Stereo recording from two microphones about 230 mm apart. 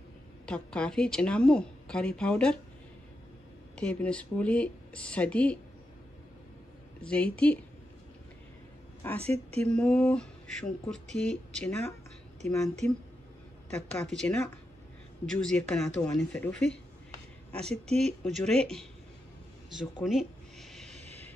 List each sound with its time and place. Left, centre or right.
0.5 s a woman's voice: centre
3.7 s a woman's voice: centre
7.0 s a woman's voice: centre
9.2 s speech: right
9.6 s a woman's voice: centre
20.0 s a sound: centre
20.9 s vehicle: right